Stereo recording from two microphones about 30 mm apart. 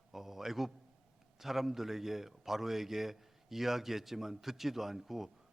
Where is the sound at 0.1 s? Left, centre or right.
Centre.